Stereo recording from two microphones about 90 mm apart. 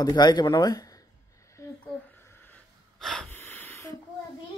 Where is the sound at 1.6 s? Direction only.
35° left (ahead or behind).